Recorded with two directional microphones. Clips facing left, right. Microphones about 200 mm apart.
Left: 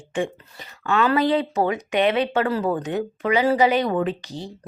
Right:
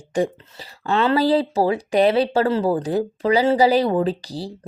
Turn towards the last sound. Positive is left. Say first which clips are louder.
# right 3 dB
turn(degrees=-35)  # may be behind; listen again after turning